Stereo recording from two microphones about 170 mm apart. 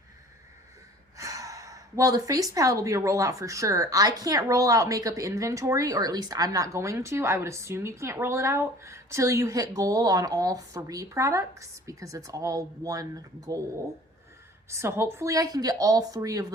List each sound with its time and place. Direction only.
1.1 s a woman's voice: 20° right (ahead or behind)
14.7 s a woman's voice: 15° right (ahead or behind)